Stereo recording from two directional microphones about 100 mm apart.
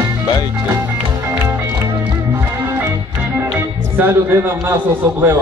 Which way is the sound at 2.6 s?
25° right (ahead or behind).